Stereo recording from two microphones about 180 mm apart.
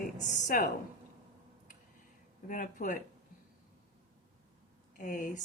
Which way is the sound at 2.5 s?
50° left (ahead or behind).